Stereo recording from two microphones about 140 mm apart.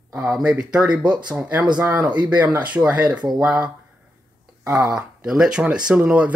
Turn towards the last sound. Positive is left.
turn(degrees=-10)  # may be behind; listen again after turning